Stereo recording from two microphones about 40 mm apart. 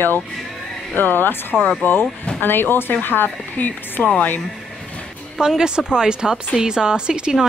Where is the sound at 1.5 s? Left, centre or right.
Centre.